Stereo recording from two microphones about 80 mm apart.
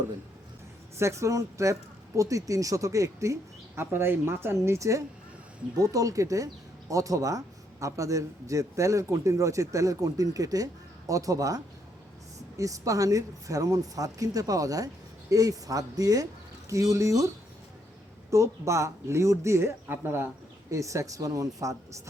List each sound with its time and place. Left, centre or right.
0.9 s speech: right
3.8 s speech: right
4.6 s speech: right
20.7 s speech: right